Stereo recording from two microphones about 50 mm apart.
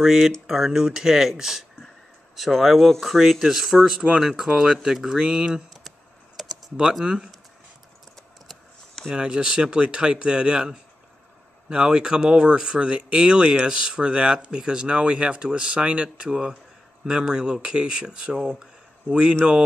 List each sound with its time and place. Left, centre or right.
0.0 s speech: centre
5.7 s computer keyboard: centre
6.8 s speech: centre
9.1 s speech: centre